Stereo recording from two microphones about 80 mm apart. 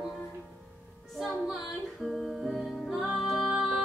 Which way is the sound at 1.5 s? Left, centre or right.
Centre.